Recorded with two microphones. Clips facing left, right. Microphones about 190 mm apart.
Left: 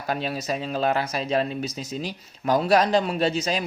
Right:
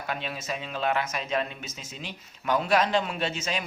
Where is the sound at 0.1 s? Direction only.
40° left (ahead or behind).